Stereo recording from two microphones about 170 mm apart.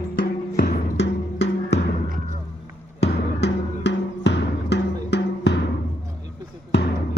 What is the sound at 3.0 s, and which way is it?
Music, 85° left.